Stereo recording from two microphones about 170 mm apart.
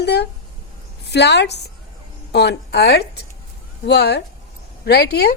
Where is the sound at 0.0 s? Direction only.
80° left.